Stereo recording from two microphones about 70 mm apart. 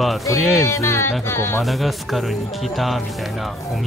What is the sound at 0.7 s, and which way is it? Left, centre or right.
Speech, left.